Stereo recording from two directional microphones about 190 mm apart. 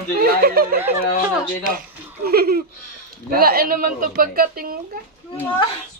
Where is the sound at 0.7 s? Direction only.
10° right (ahead or behind).